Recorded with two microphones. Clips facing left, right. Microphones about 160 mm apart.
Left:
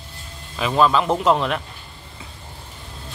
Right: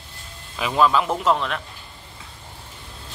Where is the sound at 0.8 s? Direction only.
5° right (ahead or behind).